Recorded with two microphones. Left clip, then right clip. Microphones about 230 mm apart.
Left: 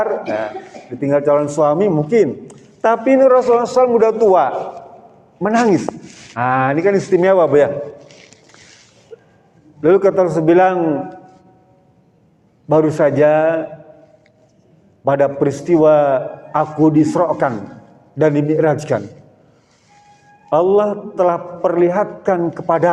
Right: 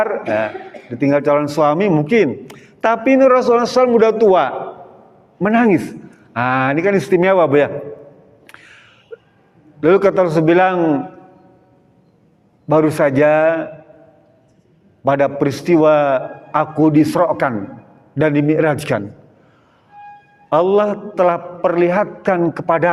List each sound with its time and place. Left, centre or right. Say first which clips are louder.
0.0 s a man's voice: right 1 dB; right
9.1 s a sound: right 3 dB; right
9.8 s a man's voice: even; right
12.6 s a man's voice: even; right
15.0 s a man's voice: left 1 dB; right
20.5 s a man's voice: even; right